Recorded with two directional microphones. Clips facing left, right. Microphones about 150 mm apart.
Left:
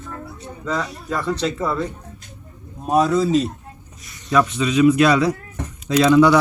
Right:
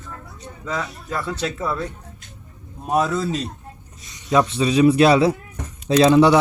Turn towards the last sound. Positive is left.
turn(degrees=-25)  # may be behind; listen again after turning